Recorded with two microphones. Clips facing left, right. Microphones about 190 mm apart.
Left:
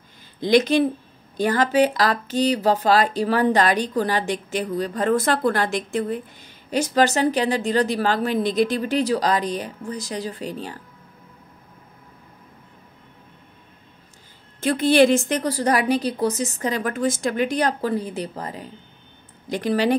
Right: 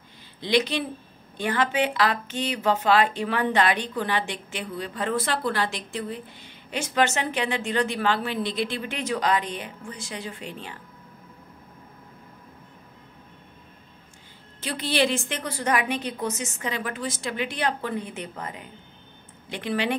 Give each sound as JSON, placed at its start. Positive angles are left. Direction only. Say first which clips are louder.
{"t": 0.4, "sound": "speech", "louder": "left 7 dB", "side_deg": 45}
{"t": 14.6, "sound": "speech", "louder": "left 9 dB", "side_deg": 50}